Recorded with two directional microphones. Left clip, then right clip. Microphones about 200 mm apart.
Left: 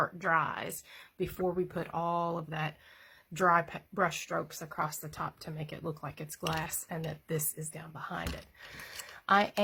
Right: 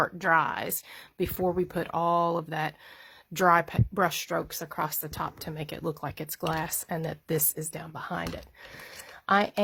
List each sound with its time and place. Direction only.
0.0 s speech: 50° right (ahead or behind)
8.7 s speech: 35° right (ahead or behind)